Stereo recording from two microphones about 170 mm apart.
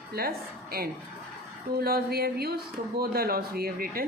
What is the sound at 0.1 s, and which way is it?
A woman's voice, 65° right (ahead or behind).